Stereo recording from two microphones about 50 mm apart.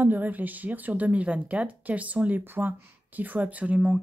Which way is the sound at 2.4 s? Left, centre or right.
Right.